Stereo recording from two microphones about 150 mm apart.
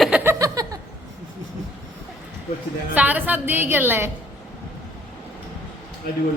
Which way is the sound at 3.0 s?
10° right (ahead or behind).